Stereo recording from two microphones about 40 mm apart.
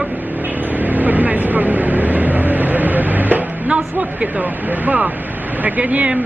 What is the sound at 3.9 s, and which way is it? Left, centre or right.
Speech, right.